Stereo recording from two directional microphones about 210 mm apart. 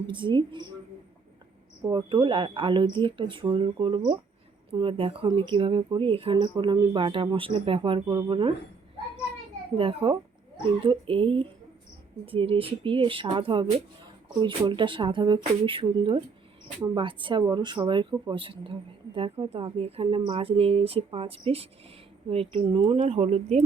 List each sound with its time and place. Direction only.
0.1 s speech: 25° right (ahead or behind)
1.8 s speech: 20° right (ahead or behind)
9.7 s speech: 25° right (ahead or behind)